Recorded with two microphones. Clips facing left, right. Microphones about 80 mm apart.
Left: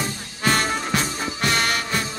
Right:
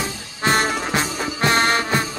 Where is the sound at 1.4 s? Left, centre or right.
Right.